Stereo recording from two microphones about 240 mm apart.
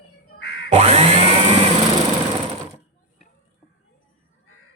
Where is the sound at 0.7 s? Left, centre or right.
Right.